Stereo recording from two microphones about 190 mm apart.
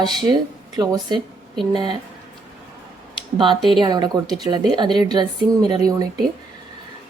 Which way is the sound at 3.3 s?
25° right (ahead or behind).